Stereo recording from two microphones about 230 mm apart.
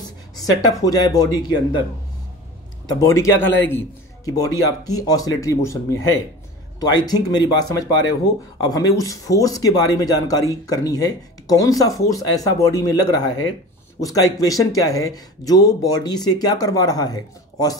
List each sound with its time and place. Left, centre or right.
0.5 s speech: centre
2.9 s speech: centre